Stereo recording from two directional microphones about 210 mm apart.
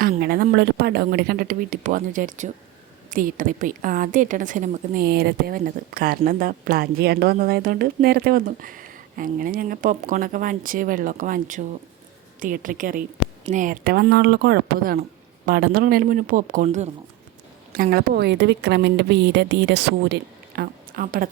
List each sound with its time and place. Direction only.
0.0 s a woman's voice: 45° right (ahead or behind)
20.6 s speech: 40° right (ahead or behind)